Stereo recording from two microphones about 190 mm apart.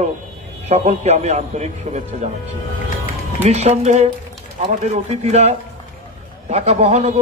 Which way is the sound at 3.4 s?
35° right (ahead or behind).